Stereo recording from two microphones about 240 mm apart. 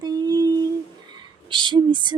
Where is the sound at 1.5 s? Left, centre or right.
Centre.